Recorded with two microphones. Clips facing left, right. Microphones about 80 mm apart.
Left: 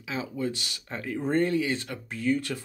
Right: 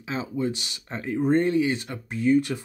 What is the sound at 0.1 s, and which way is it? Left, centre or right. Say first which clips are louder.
Speech: right 3 dB; right.